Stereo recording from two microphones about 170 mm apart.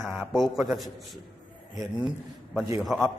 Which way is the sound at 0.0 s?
Centre (ahead or behind).